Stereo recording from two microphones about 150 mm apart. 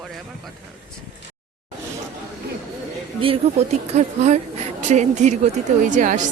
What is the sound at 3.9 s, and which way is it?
A woman's voice, 50° right (ahead or behind).